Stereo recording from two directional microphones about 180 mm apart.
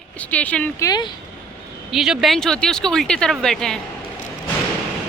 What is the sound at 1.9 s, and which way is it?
Speech, centre (ahead or behind).